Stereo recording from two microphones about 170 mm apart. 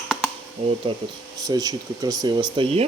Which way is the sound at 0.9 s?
30° right (ahead or behind).